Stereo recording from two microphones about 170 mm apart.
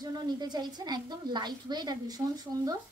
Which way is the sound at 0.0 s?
25° right (ahead or behind).